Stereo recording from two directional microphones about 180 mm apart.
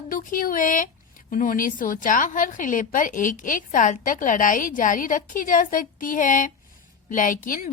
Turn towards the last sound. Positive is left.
turn(degrees=50)  # may be behind; listen again after turning